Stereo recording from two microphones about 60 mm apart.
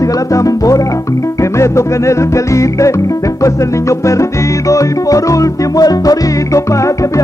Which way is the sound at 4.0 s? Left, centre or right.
Left.